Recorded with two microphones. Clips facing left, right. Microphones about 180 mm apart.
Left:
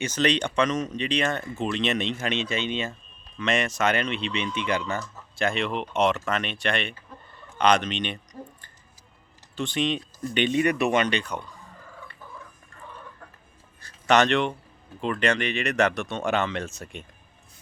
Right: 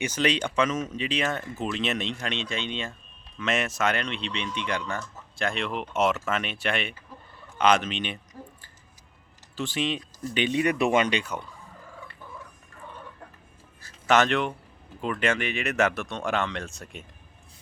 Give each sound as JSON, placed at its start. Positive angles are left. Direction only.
{"t": 0.0, "sound": "speech", "side_deg": -10}
{"t": 13.8, "sound": "speech", "side_deg": -5}